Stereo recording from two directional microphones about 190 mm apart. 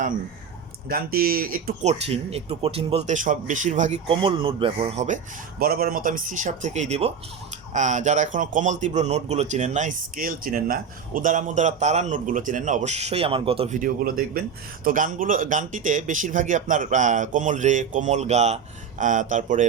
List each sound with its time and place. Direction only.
0.9 s speech: 50° right (ahead or behind)
1.8 s a man's voice: 35° right (ahead or behind)
13.7 s a man's voice: 45° right (ahead or behind)